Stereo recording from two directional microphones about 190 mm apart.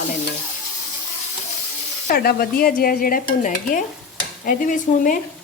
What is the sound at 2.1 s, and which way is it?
A woman's voice, 55° left (ahead or behind).